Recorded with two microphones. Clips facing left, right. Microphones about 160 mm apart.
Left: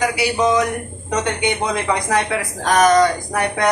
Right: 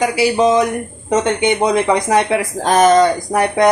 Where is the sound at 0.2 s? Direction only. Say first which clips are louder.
Right 6 dB; 30° right (ahead or behind).